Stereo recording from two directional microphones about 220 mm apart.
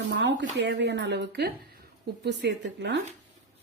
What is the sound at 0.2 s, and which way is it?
Speech, 55° right (ahead or behind).